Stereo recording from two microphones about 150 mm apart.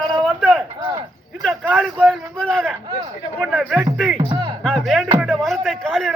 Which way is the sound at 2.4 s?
5° left (ahead or behind).